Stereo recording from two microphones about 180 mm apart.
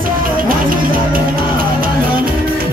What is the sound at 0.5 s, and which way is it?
Music, 50° right (ahead or behind).